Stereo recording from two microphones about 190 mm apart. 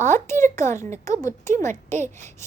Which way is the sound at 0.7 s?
15° left (ahead or behind).